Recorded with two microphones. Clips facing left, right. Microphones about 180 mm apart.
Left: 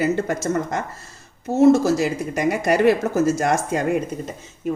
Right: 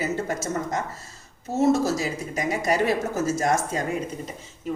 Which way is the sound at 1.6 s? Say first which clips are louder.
Left 6 dB; 60° left (ahead or behind).